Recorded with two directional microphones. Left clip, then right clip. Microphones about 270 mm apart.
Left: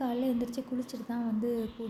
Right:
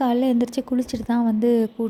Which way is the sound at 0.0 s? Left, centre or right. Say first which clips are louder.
Right 11 dB; right.